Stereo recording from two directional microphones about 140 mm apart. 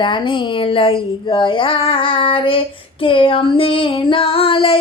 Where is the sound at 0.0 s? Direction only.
35° left (ahead or behind).